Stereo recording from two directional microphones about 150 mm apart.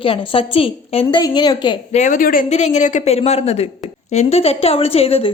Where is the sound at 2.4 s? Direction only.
50° left (ahead or behind).